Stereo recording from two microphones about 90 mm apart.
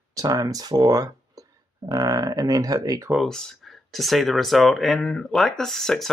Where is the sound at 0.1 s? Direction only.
40° right (ahead or behind).